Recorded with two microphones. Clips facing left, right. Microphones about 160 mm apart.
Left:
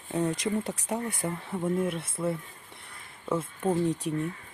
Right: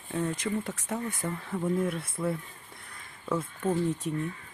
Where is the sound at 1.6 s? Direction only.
5° left (ahead or behind).